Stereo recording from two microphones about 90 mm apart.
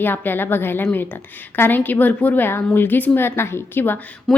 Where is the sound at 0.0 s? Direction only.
20° left (ahead or behind).